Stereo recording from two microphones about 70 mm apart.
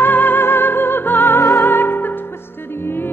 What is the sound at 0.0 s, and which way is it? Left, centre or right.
Music, left.